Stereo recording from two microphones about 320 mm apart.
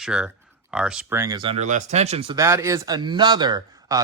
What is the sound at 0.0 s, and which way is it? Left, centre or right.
Speech, centre.